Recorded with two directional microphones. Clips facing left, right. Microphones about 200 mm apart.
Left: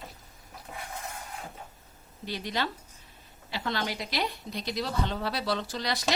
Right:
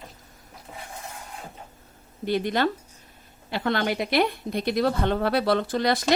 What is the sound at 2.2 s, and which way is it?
A woman's voice, 55° right (ahead or behind).